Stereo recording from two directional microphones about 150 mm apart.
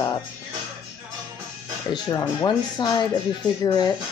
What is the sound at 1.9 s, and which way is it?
Speech, 25° left (ahead or behind).